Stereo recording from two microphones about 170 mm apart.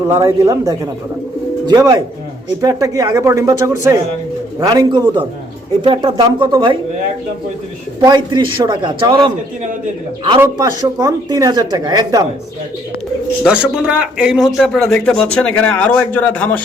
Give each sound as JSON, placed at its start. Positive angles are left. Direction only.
{"t": 0.2, "sound": "speech", "side_deg": -20}
{"t": 8.0, "sound": "speech", "side_deg": -25}
{"t": 10.4, "sound": "speech", "side_deg": -20}
{"t": 13.4, "sound": "speech", "side_deg": -5}